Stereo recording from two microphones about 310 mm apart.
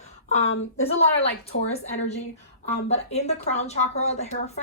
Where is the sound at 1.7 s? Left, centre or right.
Left.